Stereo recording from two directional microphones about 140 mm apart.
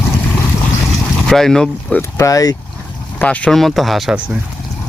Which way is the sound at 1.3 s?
5° left (ahead or behind).